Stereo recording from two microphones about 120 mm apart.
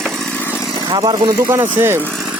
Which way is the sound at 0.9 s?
40° right (ahead or behind).